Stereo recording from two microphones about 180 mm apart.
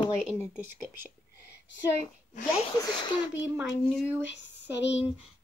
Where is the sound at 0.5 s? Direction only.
10° right (ahead or behind).